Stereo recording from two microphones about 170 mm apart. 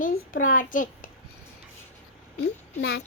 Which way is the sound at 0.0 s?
50° left (ahead or behind).